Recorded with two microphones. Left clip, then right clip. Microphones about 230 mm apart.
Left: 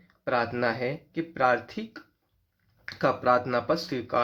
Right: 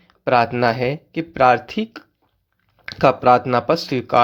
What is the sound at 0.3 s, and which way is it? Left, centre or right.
Speech, right.